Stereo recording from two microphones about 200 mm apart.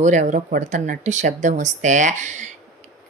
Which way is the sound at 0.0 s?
40° right (ahead or behind).